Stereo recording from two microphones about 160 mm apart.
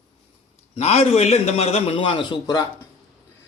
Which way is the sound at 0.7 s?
40° left (ahead or behind).